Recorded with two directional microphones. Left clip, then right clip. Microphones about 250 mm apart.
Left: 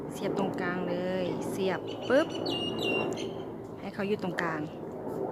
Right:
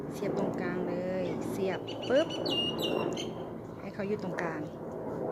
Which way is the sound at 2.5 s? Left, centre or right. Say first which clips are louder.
Even; right.